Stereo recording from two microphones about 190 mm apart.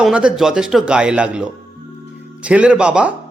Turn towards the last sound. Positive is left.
turn(degrees=-5)  # may be behind; listen again after turning